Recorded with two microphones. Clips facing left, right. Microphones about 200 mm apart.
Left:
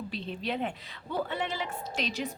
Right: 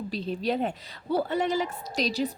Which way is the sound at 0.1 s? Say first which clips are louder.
Right 8 dB; 40° right (ahead or behind).